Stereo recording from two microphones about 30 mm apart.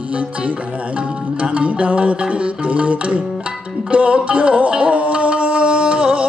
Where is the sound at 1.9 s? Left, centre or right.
Right.